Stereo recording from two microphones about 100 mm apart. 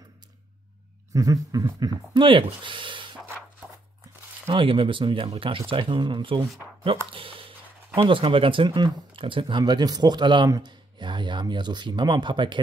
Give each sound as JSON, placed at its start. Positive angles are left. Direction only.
{"t": 1.1, "sound": "speech", "side_deg": -35}
{"t": 2.2, "sound": "speech", "side_deg": -55}
{"t": 4.5, "sound": "speech", "side_deg": -60}
{"t": 6.8, "sound": "speech", "side_deg": -65}